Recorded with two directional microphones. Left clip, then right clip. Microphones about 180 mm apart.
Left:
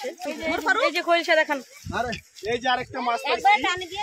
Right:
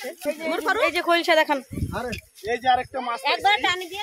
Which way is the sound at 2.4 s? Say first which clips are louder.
Right 3 dB; 40° left (ahead or behind).